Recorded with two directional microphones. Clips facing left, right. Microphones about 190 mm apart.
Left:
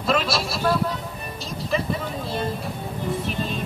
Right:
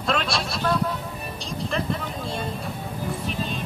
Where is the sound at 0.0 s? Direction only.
5° left (ahead or behind).